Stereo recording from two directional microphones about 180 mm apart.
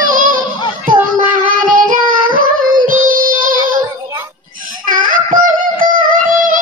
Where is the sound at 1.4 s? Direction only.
50° right (ahead or behind).